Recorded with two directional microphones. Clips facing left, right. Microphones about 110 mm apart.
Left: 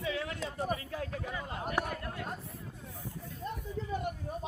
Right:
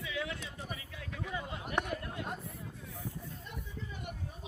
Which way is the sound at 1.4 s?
40° left (ahead or behind).